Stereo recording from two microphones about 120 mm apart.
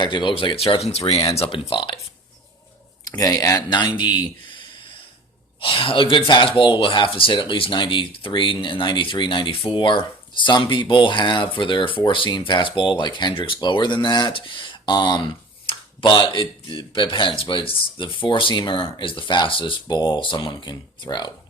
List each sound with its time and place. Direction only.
0.0 s speech: 40° left (ahead or behind)
3.2 s speech: 30° left (ahead or behind)
5.5 s speech: 50° left (ahead or behind)